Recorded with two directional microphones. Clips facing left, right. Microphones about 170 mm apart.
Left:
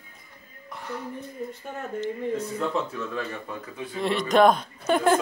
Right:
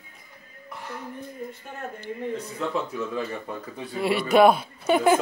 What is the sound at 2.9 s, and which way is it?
Speech, 15° right (ahead or behind).